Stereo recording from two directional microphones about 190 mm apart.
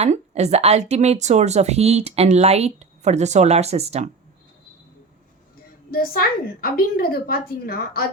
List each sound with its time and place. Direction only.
0.0 s a woman's voice: 35° right (ahead or behind)
5.9 s a woman's voice: 50° left (ahead or behind)